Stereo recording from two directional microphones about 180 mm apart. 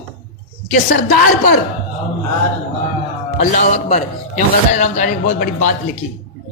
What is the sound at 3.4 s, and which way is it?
A man's voice, 40° left (ahead or behind).